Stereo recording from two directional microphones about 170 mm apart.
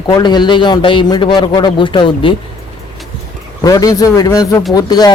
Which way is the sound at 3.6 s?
20° left (ahead or behind).